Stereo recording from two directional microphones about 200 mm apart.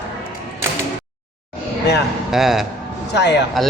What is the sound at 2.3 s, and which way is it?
Speech, centre (ahead or behind).